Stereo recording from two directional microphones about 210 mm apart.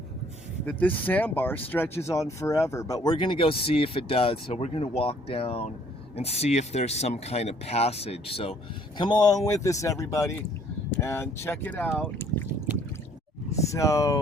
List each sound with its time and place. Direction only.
0.6 s speech: 5° left (ahead or behind)
13.6 s speech: 15° left (ahead or behind)